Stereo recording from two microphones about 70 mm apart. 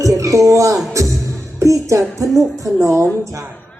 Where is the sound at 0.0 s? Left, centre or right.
Right.